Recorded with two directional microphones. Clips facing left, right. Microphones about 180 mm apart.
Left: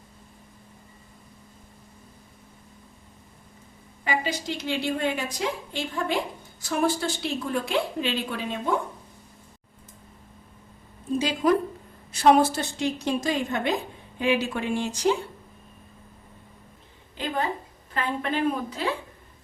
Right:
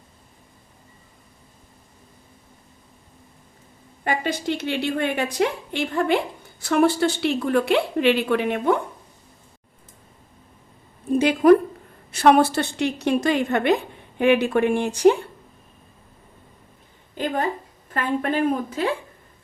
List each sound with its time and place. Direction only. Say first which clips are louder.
4.0 s a woman's voice: right 4 dB; 55° right (ahead or behind)
11.1 s a woman's voice: right 8 dB; 60° right (ahead or behind)
17.2 s a woman's voice: right 4 dB; 50° right (ahead or behind)